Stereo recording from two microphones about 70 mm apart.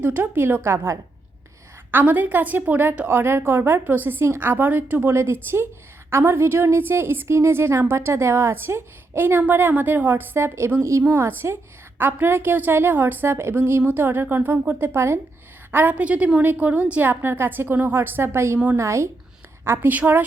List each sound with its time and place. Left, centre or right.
0.0 s a woman's voice: right
1.9 s a woman's voice: right
5.1 s a woman's voice: right
11.9 s a woman's voice: right
14.9 s a woman's voice: right
15.7 s a woman's voice: right
19.6 s a woman's voice: right